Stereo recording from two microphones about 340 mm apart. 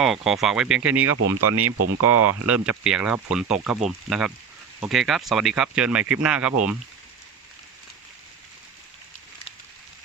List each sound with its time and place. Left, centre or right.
0.0 s speech: centre
1.4 s speech: right
2.5 s speech: centre